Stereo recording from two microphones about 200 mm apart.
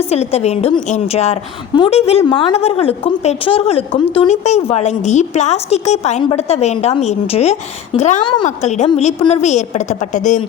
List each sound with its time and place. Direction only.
0.1 s a woman's voice: 30° left (ahead or behind)